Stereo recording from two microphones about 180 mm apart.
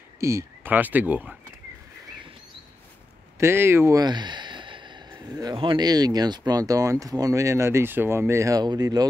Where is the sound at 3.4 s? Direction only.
15° right (ahead or behind).